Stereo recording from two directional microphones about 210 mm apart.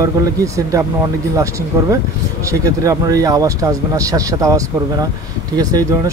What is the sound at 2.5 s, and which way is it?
Speech, 15° right (ahead or behind).